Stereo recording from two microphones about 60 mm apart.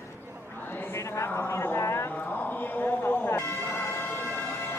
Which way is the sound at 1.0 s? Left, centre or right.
Left.